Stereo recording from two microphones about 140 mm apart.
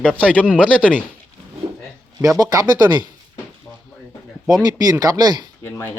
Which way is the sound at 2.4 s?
25° right (ahead or behind).